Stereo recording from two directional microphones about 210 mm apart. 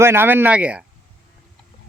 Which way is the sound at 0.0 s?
10° right (ahead or behind).